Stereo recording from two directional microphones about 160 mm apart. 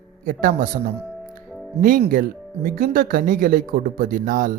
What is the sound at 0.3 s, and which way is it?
Speech, 60° right (ahead or behind).